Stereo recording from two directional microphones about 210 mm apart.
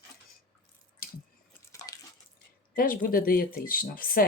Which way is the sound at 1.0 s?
45° left (ahead or behind).